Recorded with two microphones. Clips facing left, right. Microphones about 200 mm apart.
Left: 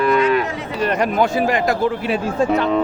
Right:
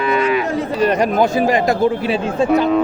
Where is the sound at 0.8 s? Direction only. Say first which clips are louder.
Right 2 dB; 40° right (ahead or behind).